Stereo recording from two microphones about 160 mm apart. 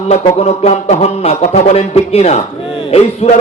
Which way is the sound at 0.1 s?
40° left (ahead or behind).